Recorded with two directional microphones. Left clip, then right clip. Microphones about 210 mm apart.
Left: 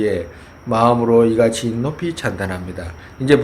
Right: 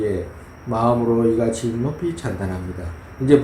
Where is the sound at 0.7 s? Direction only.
35° left (ahead or behind).